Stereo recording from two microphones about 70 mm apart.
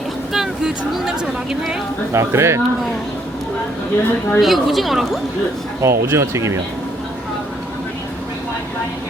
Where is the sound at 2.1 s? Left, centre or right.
Right.